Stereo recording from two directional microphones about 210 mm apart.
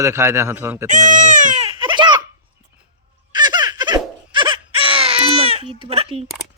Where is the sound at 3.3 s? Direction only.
20° right (ahead or behind).